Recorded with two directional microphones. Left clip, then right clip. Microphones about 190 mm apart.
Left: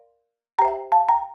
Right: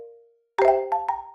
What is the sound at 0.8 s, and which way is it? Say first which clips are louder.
Music: left 8 dB; 30° right (ahead or behind).